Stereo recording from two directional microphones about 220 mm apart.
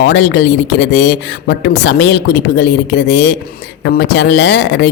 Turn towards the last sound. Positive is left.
turn(degrees=50)  # may be behind; listen again after turning